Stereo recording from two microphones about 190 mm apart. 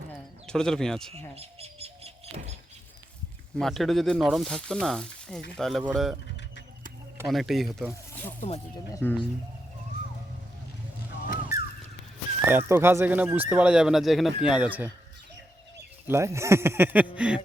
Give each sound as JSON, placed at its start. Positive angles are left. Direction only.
{"t": 0.4, "sound": "speech", "side_deg": 5}
{"t": 1.4, "sound": "bird", "side_deg": -30}
{"t": 3.6, "sound": "speech", "side_deg": 0}
{"t": 7.3, "sound": "speech", "side_deg": 0}
{"t": 8.4, "sound": "speech", "side_deg": 35}
{"t": 8.9, "sound": "speech", "side_deg": 10}
{"t": 11.5, "sound": "a sound", "side_deg": -15}
{"t": 12.5, "sound": "speech", "side_deg": -10}
{"t": 16.0, "sound": "speech", "side_deg": -15}